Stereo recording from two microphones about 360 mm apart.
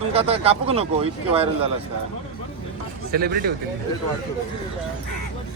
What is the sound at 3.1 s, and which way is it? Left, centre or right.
Speech, right.